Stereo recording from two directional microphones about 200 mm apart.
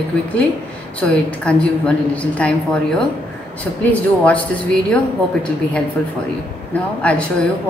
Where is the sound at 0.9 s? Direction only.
5° left (ahead or behind).